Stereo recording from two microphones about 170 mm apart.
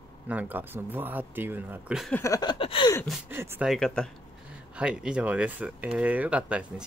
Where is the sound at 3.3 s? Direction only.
15° right (ahead or behind).